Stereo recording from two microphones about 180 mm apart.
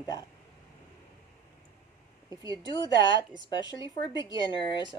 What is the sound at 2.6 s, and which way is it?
A woman's voice, 25° left (ahead or behind).